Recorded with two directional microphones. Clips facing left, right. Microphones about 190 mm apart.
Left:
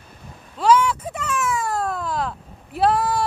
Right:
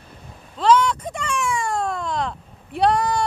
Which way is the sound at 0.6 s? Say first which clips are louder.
Even; 10° left (ahead or behind).